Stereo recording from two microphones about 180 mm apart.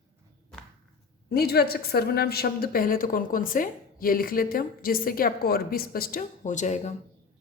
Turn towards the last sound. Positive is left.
turn(degrees=40)  # may be behind; listen again after turning